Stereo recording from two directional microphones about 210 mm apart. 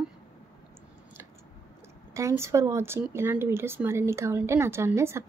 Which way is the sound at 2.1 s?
15° right (ahead or behind).